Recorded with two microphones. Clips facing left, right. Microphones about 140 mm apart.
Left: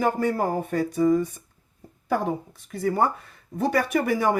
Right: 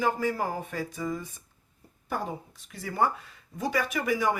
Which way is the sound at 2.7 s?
50° left (ahead or behind).